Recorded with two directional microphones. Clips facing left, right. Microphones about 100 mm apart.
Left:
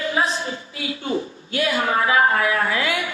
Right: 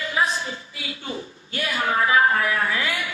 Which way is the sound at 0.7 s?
50° left (ahead or behind).